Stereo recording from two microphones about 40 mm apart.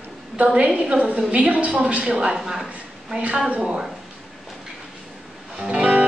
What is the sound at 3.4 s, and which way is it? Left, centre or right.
Speech, right.